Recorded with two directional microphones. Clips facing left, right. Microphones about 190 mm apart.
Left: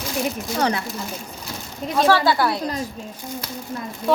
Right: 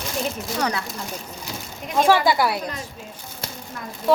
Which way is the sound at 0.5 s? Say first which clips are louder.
Left 4 dB; 30° left (ahead or behind).